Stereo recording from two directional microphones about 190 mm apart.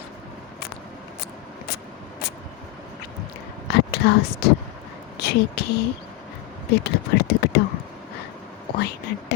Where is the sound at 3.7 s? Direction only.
60° left (ahead or behind).